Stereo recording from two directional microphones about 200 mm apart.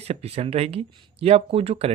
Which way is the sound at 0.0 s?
30° right (ahead or behind).